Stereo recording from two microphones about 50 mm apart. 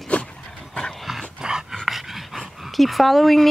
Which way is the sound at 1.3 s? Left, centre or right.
Centre.